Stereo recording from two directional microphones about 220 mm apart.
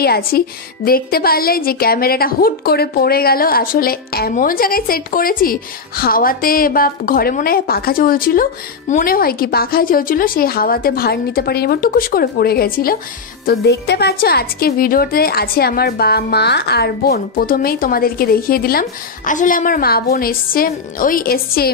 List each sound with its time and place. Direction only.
0.0 s a woman's voice: 45° left (ahead or behind)